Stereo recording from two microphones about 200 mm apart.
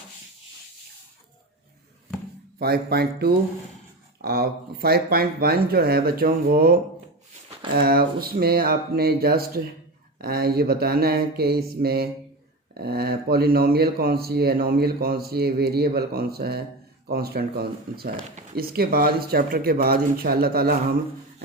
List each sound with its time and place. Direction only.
2.6 s speech: 50° right (ahead or behind)
7.8 s speech: 50° right (ahead or behind)